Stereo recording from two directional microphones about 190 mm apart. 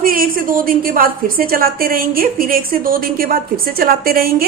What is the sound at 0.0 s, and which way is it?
A woman's voice, 50° right (ahead or behind).